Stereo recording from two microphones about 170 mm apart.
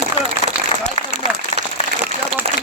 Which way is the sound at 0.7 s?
30° left (ahead or behind).